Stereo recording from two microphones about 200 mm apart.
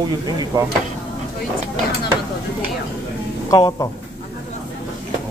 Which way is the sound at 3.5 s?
20° left (ahead or behind).